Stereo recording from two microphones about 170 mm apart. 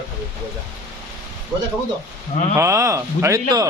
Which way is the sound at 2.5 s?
15° right (ahead or behind).